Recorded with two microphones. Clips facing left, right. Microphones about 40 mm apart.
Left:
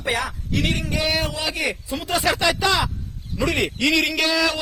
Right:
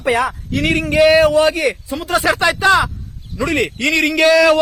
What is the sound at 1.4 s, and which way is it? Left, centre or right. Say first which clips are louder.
Speech: right 11 dB; right.